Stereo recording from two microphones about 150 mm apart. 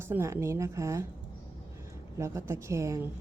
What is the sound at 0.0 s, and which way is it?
A woman's voice, 15° right (ahead or behind).